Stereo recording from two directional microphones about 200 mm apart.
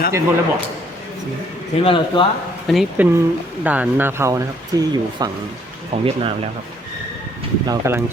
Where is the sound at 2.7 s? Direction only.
Centre (ahead or behind); by 4.9 s 20° right (ahead or behind).